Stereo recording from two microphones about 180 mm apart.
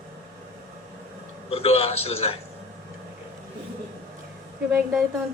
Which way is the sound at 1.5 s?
35° left (ahead or behind).